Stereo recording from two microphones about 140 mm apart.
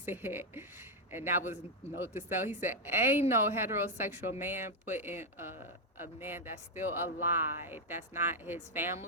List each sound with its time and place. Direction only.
0.0 s a woman's voice: 15° right (ahead or behind)